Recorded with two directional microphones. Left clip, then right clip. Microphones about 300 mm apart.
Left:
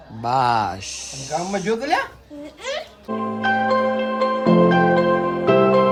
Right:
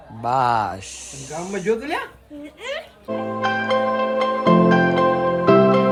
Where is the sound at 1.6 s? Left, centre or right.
Centre.